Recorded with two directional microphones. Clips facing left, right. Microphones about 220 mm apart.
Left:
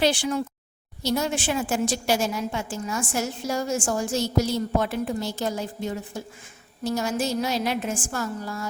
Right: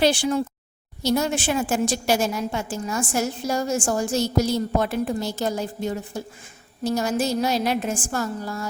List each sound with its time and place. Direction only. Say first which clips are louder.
0.0 s a woman's voice: right 3 dB; 35° right (ahead or behind)
1.0 s a woman's voice: right 3 dB; 45° right (ahead or behind)